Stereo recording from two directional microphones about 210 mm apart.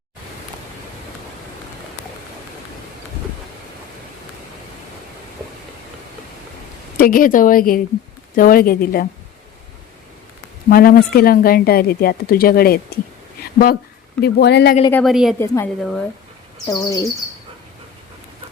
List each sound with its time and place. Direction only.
6.9 s speech: 45° left (ahead or behind)
10.7 s speech: 45° left (ahead or behind)
13.4 s a sound: 45° left (ahead or behind)
14.2 s speech: 50° left (ahead or behind)
15.0 s a woman's voice: centre (ahead or behind)
15.4 s speech: 10° left (ahead or behind)
15.8 s a woman's voice: centre (ahead or behind)
16.6 s speech: 15° left (ahead or behind)